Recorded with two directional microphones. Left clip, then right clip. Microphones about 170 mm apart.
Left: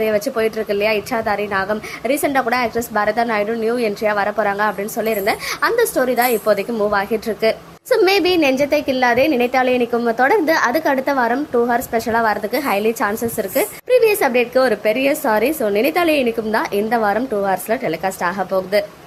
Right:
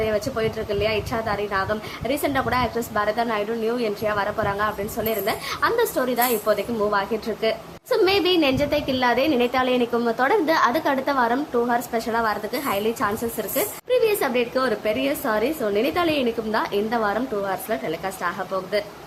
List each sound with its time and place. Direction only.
0.0 s a woman's voice: 25° left (ahead or behind)